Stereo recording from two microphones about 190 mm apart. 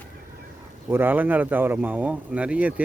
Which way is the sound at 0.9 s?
10° right (ahead or behind).